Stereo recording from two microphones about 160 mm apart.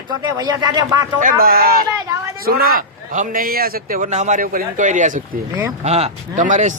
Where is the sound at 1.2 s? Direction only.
60° right (ahead or behind).